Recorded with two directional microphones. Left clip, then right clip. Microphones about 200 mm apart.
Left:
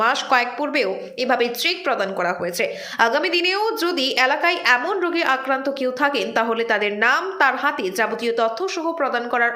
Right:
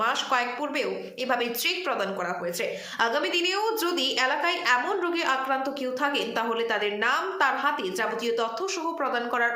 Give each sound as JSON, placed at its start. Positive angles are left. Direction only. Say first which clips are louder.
{"t": 0.0, "sound": "a woman's voice", "louder": "left 7 dB", "side_deg": 20}